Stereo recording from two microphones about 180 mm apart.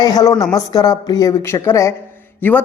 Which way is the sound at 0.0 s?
20° left (ahead or behind).